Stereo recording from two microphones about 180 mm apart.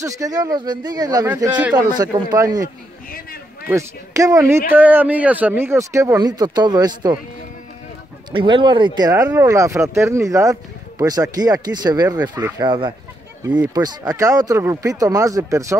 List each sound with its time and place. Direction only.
0.0 s speech: 20° right (ahead or behind)
3.1 s a sound: 55° left (ahead or behind)
3.6 s speech: 15° right (ahead or behind)
8.3 s speech: 25° right (ahead or behind)
13.4 s speech: 10° right (ahead or behind)
13.7 s speech: 20° right (ahead or behind)